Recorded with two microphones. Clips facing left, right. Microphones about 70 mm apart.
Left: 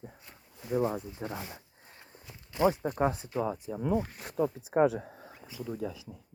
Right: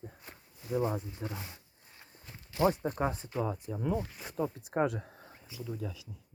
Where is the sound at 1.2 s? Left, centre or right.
Left.